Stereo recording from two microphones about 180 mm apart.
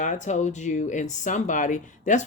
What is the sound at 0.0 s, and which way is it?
Speech, 40° left (ahead or behind).